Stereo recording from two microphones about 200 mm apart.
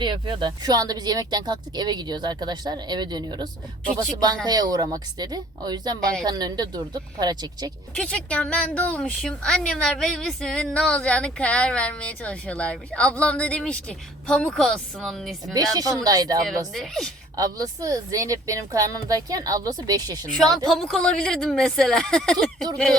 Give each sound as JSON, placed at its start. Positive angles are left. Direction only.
{"t": 0.0, "sound": "speech", "side_deg": -25}
{"t": 7.9, "sound": "a woman's voice", "side_deg": 5}
{"t": 15.5, "sound": "speech", "side_deg": -20}
{"t": 16.7, "sound": "a woman's voice", "side_deg": 0}
{"t": 17.3, "sound": "speech", "side_deg": -20}
{"t": 20.7, "sound": "a woman's voice", "side_deg": 0}